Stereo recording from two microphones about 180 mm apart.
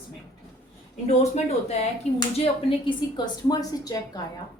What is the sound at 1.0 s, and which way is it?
Speech, 40° left (ahead or behind).